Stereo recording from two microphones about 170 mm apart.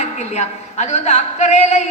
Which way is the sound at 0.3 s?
40° left (ahead or behind).